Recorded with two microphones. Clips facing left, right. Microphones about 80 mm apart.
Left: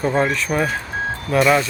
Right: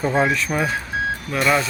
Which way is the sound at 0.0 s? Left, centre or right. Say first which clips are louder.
Even; centre.